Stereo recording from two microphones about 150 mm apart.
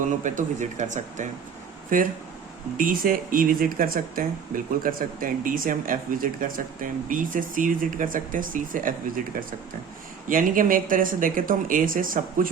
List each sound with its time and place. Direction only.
0.2 s speech: 60° right (ahead or behind)